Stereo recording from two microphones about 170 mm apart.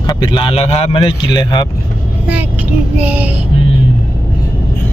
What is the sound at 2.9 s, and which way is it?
Child singing, 10° right (ahead or behind).